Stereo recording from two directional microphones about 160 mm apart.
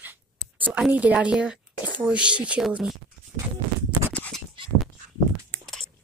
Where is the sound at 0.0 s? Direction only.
10° right (ahead or behind).